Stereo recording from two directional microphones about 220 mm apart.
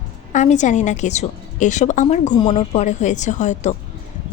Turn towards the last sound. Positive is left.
turn(degrees=35)  # may be behind; listen again after turning